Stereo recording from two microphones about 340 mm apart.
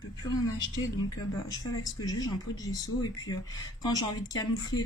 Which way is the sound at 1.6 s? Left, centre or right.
Centre.